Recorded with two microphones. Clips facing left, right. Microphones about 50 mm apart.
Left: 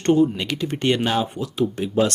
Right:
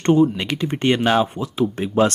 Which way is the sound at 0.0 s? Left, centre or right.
Right.